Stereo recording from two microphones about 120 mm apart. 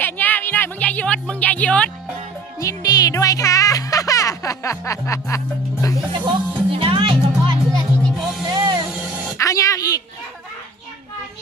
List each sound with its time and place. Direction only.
0.0 s music: 15° left (ahead or behind)
2.6 s music: 30° left (ahead or behind)
6.2 s music: 45° right (ahead or behind)
8.5 s vehicle: 30° right (ahead or behind)
9.4 s a sound: 25° left (ahead or behind)